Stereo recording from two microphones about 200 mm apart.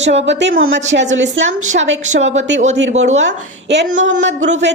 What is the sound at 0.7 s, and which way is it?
Speech, 35° right (ahead or behind).